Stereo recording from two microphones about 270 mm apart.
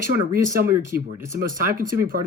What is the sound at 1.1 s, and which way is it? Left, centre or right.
Speech, centre.